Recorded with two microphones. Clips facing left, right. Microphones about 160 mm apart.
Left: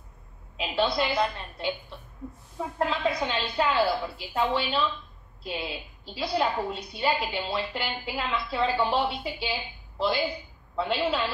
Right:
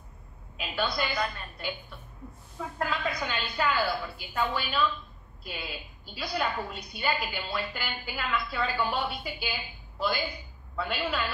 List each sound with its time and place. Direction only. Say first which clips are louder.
0.6 s a woman's voice: left 5 dB; 25° left (ahead or behind)